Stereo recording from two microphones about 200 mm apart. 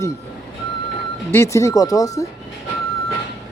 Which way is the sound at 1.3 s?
15° left (ahead or behind).